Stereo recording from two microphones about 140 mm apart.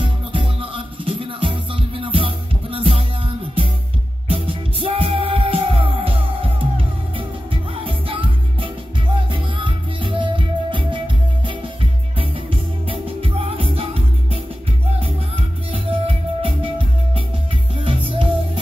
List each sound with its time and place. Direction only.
0.0 s music: 35° right (ahead or behind)
4.3 s music: 40° right (ahead or behind)
7.8 s music: 35° right (ahead or behind)